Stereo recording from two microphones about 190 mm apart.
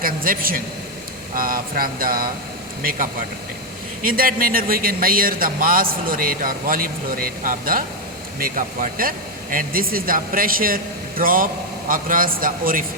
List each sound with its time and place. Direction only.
0.0 s a man's voice: 50° right (ahead or behind)
4.0 s a man's voice: 50° right (ahead or behind)